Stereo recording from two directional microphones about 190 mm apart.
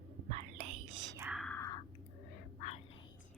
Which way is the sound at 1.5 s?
15° left (ahead or behind).